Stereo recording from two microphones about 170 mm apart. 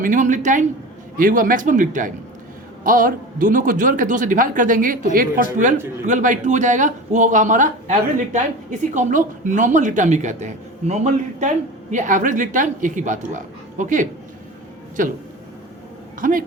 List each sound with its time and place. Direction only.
0.0 s speech: 50° right (ahead or behind)